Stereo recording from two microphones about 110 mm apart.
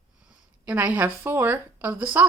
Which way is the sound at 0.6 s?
15° right (ahead or behind).